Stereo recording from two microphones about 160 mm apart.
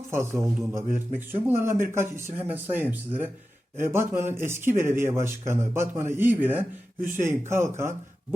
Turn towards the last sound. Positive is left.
turn(degrees=-15)  # may be behind; listen again after turning